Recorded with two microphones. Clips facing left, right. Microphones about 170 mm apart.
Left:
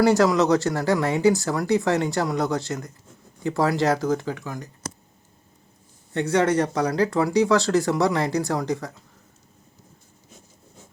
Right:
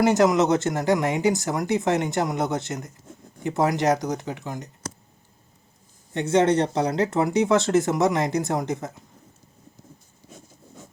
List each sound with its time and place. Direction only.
0.0 s speech: 20° right (ahead or behind)
6.1 s speech: 20° right (ahead or behind)